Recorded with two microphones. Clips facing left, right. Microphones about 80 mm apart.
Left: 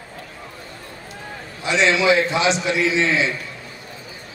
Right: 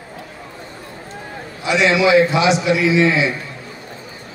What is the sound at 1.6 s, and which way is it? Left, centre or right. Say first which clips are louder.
A man's voice: right 3 dB; centre.